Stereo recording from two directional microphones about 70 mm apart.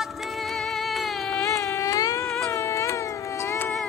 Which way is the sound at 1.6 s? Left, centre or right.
Left.